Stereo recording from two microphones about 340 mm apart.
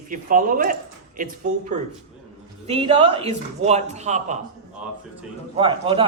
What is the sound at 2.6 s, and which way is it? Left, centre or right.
A man's voice, centre.